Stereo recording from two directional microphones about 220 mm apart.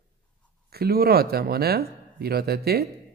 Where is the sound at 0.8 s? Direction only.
45° right (ahead or behind).